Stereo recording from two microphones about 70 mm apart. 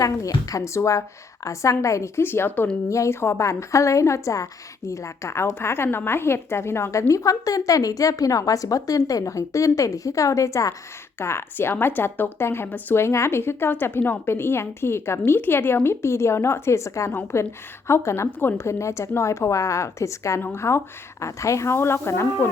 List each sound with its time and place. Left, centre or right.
0.0 s speech: left
2.2 s speech: left
7.1 s a woman's voice: left
11.2 s speech: left
18.3 s speech: left